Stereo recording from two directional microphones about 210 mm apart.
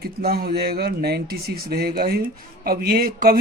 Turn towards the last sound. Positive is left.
turn(degrees=-45)  # may be behind; listen again after turning